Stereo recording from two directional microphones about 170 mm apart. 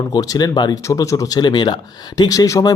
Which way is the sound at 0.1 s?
20° left (ahead or behind).